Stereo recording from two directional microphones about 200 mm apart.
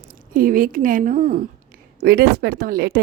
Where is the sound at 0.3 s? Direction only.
45° right (ahead or behind).